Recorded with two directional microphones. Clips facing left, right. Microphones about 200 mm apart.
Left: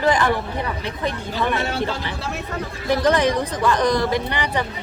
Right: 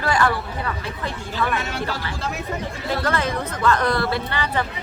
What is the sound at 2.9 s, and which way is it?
Speech, 15° left (ahead or behind).